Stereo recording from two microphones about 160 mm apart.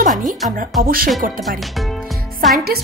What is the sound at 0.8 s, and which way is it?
Speech, 65° right (ahead or behind).